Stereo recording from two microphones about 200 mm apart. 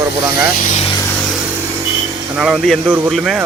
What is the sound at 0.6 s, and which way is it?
Speech, 35° left (ahead or behind).